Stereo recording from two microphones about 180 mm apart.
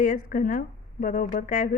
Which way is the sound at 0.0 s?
50° left (ahead or behind).